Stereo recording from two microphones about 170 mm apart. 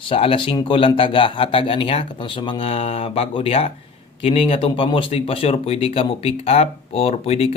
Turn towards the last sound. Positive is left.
turn(degrees=35)  # may be behind; listen again after turning